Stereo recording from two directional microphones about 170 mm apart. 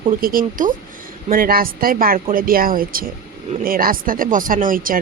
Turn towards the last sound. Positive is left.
turn(degrees=-55)  # may be behind; listen again after turning